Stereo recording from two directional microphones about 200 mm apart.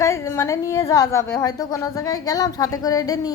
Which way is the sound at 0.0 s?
15° left (ahead or behind).